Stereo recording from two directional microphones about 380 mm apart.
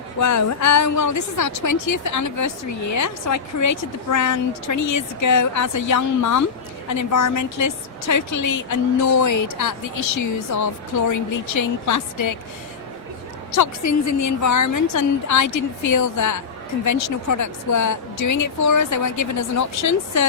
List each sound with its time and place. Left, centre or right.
0.2 s a woman's voice: left
13.6 s a woman's voice: left